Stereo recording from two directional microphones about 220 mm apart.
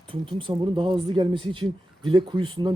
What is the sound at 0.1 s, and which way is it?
Speech, 20° right (ahead or behind).